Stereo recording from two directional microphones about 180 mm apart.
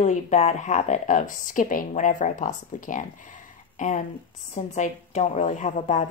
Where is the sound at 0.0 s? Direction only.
40° left (ahead or behind).